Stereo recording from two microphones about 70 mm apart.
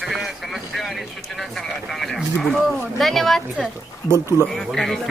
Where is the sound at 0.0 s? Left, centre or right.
Centre.